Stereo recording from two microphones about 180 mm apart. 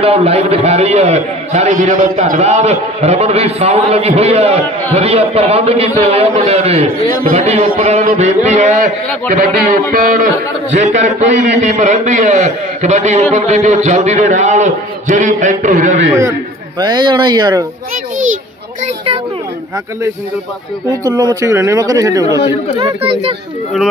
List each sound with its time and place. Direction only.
0.0 s a man's voice: 35° right (ahead or behind)
6.9 s a man's voice: 55° right (ahead or behind)
7.3 s a man's voice: 35° right (ahead or behind)
16.8 s speech: 25° right (ahead or behind)
21.0 s speech: 20° right (ahead or behind)